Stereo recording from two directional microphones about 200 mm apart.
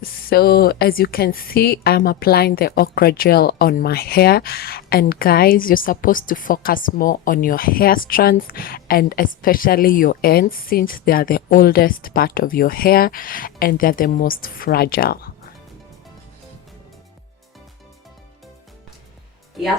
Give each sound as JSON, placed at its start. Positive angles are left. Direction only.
{"t": 0.0, "sound": "speech", "side_deg": 50}